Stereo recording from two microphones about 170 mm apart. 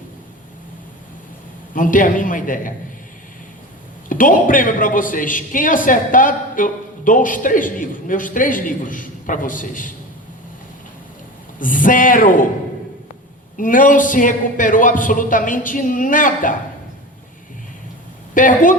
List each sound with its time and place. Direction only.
1.7 s a man's voice: 50° left (ahead or behind)
4.1 s a man's voice: 50° left (ahead or behind)
11.6 s a man's voice: 50° left (ahead or behind)
13.6 s a man's voice: 50° left (ahead or behind)
18.3 s a man's voice: 50° left (ahead or behind)